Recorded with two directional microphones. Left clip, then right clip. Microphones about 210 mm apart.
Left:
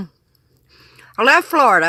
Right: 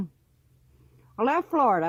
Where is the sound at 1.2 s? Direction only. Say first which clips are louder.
Left 11 dB; 15° left (ahead or behind).